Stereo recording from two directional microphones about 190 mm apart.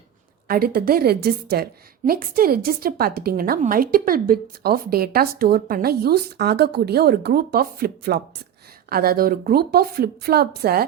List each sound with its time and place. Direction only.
0.4 s a woman's voice: 50° right (ahead or behind)